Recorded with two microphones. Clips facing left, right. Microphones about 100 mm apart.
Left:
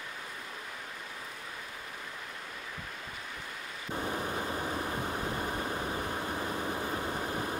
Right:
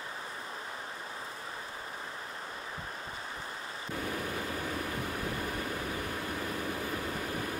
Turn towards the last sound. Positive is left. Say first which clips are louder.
# left 2 dB
turn(degrees=25)  # may be behind; listen again after turning